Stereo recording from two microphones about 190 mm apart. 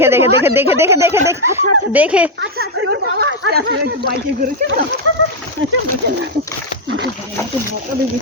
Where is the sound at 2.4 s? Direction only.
65° right (ahead or behind).